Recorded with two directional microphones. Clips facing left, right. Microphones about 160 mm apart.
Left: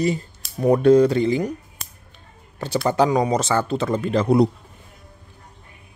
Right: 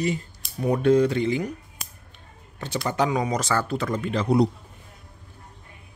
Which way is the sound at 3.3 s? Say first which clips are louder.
Left 4 dB; 25° left (ahead or behind).